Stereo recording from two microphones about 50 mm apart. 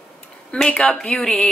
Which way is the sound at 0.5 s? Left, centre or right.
Left.